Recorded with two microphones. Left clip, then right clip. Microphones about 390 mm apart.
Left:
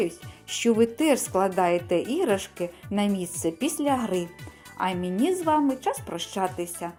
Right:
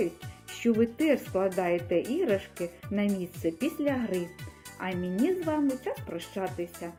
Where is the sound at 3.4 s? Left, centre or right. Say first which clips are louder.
Left 3 dB; left.